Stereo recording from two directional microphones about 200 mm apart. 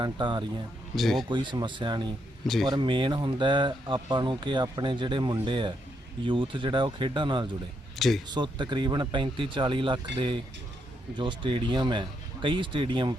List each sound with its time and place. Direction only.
0.0 s speech: 25° right (ahead or behind)
0.9 s speech: centre (ahead or behind)
1.3 s speech: 25° right (ahead or behind)
7.9 s speech: centre (ahead or behind)
8.3 s speech: 20° right (ahead or behind)